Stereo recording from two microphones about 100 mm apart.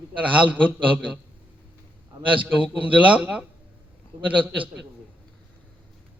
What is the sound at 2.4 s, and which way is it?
A man's voice, 15° right (ahead or behind).